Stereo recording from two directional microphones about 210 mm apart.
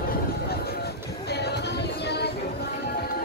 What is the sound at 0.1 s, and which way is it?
Music, 50° left (ahead or behind).